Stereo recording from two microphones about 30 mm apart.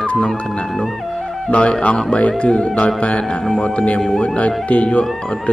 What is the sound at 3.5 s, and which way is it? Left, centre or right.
Speech, left.